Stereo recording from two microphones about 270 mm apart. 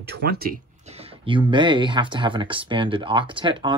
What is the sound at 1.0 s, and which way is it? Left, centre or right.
Speech, centre.